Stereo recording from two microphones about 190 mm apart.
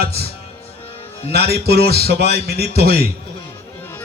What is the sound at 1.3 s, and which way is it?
A man's voice, 55° right (ahead or behind).